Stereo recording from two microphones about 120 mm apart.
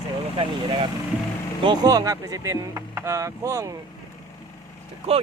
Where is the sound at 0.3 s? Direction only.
45° right (ahead or behind).